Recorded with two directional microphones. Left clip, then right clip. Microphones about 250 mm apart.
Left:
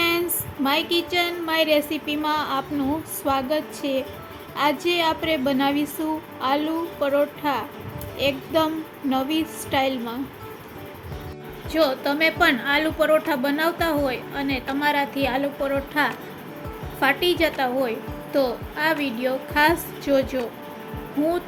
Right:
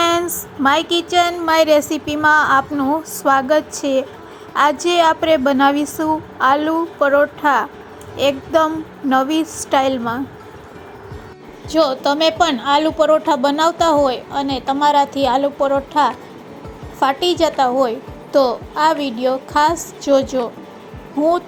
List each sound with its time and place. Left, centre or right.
0.0 s a sound: centre
0.6 s a woman's voice: right
11.8 s a woman's voice: centre